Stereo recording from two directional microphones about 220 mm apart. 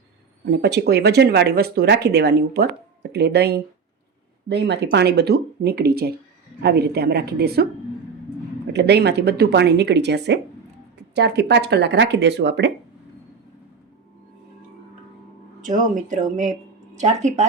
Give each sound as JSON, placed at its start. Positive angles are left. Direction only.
{"t": 0.5, "sound": "speech", "side_deg": -50}
{"t": 8.7, "sound": "speech", "side_deg": -50}
{"t": 15.6, "sound": "speech", "side_deg": -35}